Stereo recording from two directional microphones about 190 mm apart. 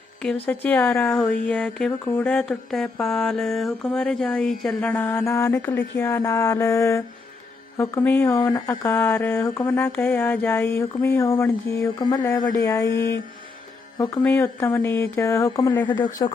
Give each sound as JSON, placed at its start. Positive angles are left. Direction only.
{"t": 0.2, "sound": "a man's voice", "side_deg": 5}